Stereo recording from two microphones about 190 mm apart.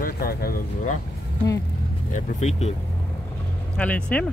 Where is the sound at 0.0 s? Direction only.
50° left (ahead or behind).